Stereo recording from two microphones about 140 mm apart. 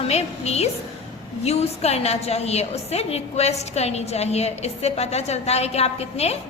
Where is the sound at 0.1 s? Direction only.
50° left (ahead or behind).